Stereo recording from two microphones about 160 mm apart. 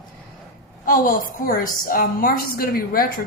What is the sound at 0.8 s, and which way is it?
A woman's voice, 60° left (ahead or behind).